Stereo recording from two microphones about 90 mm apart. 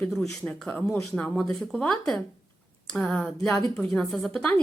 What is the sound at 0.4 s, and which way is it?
A woman's voice, 10° left (ahead or behind).